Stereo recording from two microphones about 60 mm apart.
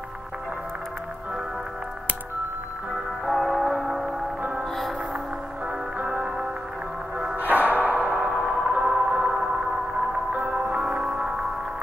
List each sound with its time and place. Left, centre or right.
3.3 s music: centre
5.9 s music: centre
7.3 s music: right